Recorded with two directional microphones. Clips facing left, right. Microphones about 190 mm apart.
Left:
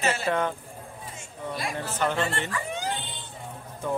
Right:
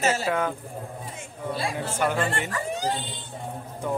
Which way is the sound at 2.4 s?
40° right (ahead or behind).